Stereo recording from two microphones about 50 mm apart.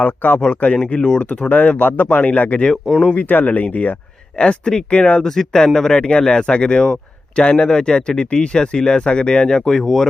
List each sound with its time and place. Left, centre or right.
0.0 s speech: left
0.9 s speech: centre
4.4 s speech: centre